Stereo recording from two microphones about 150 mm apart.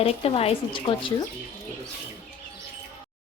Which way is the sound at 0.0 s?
40° left (ahead or behind).